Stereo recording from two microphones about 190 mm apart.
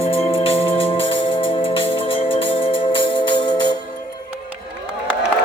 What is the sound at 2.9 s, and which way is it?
Music, 25° left (ahead or behind).